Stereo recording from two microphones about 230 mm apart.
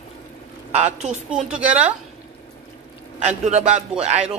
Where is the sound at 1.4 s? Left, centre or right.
Centre.